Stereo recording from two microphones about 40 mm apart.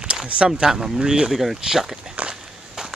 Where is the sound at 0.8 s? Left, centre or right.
Centre.